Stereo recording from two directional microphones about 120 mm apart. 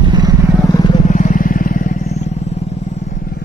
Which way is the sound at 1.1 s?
90° left.